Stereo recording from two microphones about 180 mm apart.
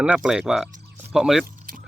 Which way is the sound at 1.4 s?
50° right (ahead or behind).